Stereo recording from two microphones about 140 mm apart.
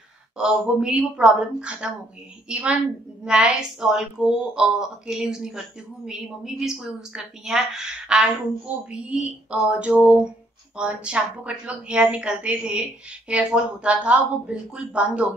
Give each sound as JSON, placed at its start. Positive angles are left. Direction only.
{"t": 0.4, "sound": "a woman's voice", "side_deg": -5}